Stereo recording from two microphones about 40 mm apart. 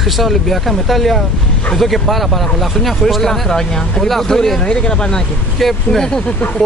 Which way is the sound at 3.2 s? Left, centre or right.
Centre.